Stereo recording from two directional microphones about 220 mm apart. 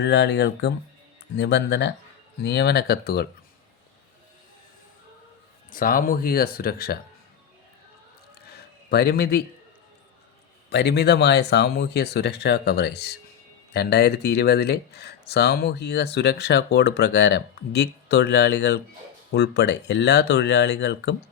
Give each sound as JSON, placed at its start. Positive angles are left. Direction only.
{"t": 0.0, "sound": "speech", "side_deg": 55}
{"t": 5.7, "sound": "speech", "side_deg": 40}
{"t": 8.4, "sound": "a sound", "side_deg": 45}
{"t": 10.7, "sound": "speech", "side_deg": 50}